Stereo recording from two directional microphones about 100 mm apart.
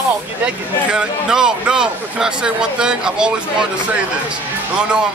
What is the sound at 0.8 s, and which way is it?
Speech, 10° right (ahead or behind).